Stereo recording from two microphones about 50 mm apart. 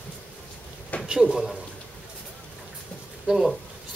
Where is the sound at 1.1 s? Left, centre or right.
Centre.